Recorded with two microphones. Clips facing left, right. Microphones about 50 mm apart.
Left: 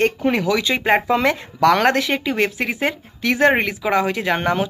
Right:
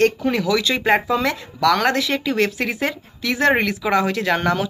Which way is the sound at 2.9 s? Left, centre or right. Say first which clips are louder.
Left 3 dB; left.